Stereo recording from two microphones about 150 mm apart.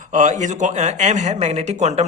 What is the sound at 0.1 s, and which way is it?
Speech, 55° right (ahead or behind).